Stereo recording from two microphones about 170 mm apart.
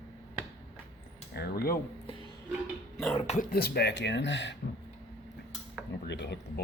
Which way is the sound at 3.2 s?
40° left (ahead or behind).